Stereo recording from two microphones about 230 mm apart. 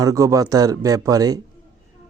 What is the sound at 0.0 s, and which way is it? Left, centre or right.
Speech, centre.